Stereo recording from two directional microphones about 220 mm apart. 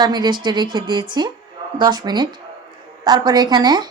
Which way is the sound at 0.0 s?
20° right (ahead or behind).